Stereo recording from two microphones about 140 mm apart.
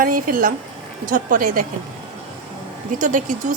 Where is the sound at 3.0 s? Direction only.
70° right (ahead or behind).